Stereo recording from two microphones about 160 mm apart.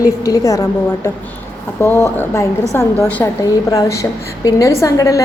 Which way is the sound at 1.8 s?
15° left (ahead or behind).